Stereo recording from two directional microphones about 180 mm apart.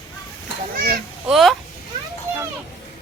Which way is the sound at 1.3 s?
Centre (ahead or behind).